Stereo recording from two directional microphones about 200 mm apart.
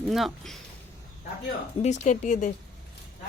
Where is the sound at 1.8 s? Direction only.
35° left (ahead or behind).